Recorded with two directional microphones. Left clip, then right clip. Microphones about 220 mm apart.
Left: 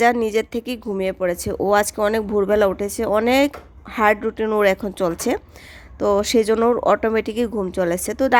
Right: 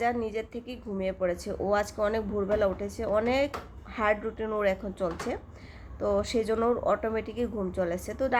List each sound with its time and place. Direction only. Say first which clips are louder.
0.0 s speech: left 12 dB; 45° left (ahead or behind)